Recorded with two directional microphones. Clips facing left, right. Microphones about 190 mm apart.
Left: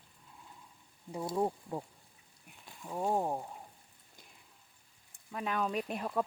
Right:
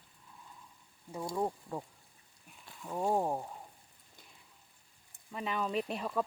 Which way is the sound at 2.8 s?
5° left (ahead or behind).